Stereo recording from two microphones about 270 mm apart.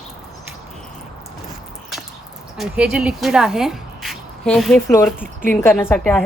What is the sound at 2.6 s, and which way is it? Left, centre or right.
A woman's voice, centre.